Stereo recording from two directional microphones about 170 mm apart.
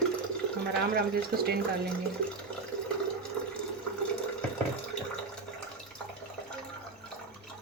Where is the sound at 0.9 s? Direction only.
65° right (ahead or behind).